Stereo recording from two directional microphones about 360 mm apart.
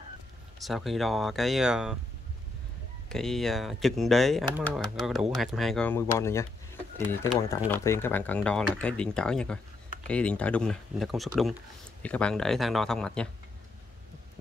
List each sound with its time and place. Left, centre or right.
0.6 s speech: centre
3.1 s speech: centre